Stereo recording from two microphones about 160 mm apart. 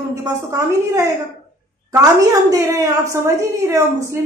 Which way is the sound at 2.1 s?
20° right (ahead or behind).